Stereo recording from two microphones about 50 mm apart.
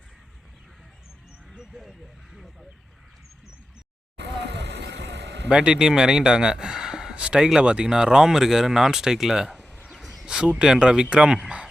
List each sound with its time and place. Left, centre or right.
2.3 s speech: centre
5.5 s speech: centre
9.8 s bird: centre
10.2 s a man's voice: centre